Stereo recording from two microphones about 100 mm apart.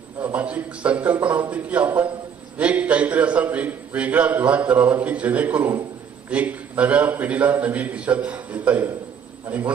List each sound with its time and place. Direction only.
0.2 s a man's voice: 15° right (ahead or behind)